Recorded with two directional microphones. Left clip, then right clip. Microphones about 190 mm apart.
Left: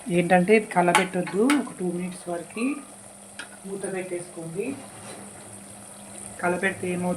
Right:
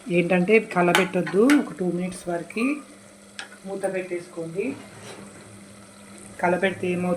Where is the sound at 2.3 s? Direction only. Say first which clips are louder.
Right 3 dB; 20° right (ahead or behind).